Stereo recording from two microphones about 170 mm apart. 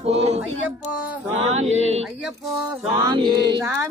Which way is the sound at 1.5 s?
40° right (ahead or behind).